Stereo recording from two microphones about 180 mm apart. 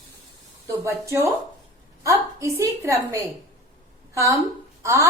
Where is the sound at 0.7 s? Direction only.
15° right (ahead or behind).